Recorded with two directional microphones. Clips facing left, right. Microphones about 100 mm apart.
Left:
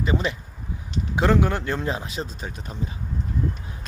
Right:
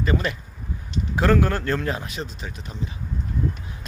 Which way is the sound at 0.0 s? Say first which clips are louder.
Even; 15° left (ahead or behind).